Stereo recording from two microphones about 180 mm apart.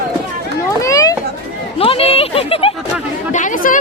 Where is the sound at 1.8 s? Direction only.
30° left (ahead or behind).